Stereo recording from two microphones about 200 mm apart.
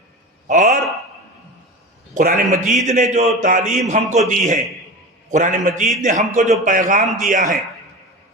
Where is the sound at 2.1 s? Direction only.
40° right (ahead or behind).